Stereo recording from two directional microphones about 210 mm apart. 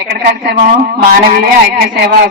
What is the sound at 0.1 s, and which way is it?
Speech, 50° right (ahead or behind).